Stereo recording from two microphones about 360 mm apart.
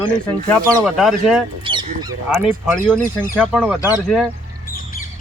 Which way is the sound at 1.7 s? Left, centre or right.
Centre.